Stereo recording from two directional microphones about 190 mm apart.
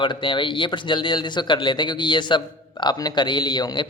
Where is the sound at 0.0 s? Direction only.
25° left (ahead or behind).